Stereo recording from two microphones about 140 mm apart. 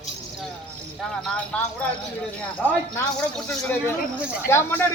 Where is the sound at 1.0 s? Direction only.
5° left (ahead or behind).